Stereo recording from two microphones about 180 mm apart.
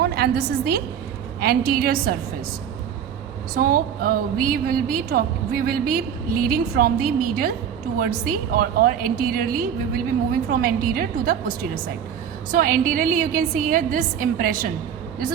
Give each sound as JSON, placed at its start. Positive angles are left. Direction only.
{"t": 0.0, "sound": "a woman's voice", "side_deg": -60}
{"t": 3.5, "sound": "a woman's voice", "side_deg": -50}